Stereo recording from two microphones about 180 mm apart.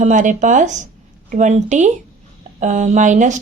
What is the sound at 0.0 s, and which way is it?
Speech, 45° right (ahead or behind).